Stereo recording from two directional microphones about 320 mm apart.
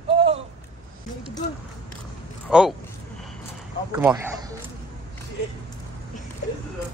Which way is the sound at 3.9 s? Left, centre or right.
Centre.